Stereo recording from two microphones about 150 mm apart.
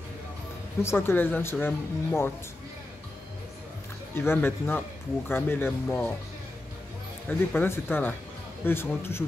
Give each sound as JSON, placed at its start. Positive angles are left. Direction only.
{"t": 0.8, "sound": "speech", "side_deg": 15}
{"t": 4.1, "sound": "speech", "side_deg": 15}
{"t": 7.2, "sound": "speech", "side_deg": 15}